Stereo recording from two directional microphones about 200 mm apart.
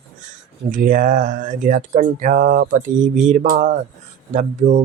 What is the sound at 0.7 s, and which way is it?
Speech, 40° right (ahead or behind).